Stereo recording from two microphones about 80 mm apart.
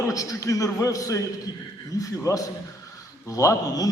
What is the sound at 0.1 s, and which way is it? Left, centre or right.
A man's voice, left.